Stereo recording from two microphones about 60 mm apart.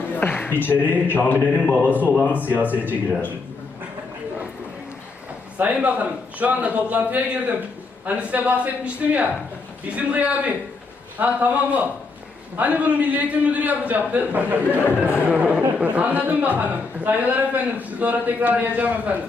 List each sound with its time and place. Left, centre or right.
0.2 s a man's voice: left
2.6 s a man's voice: right
2.9 s a man's voice: left
5.5 s a man's voice: right